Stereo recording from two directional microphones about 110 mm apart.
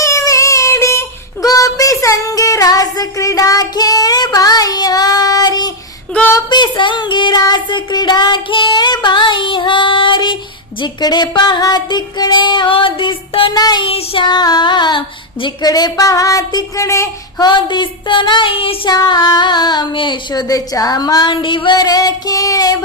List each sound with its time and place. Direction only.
0.0 s child singing: 30° left (ahead or behind); by 10.3 s 45° left (ahead or behind)
10.8 s music: 40° left (ahead or behind)
13.5 s child singing: 35° left (ahead or behind)
13.8 s child singing: 55° left (ahead or behind)
14.3 s music: 40° left (ahead or behind)
15.6 s child singing: 35° left (ahead or behind); by 18.8 s 55° left (ahead or behind)
18.9 s child singing: 40° left (ahead or behind)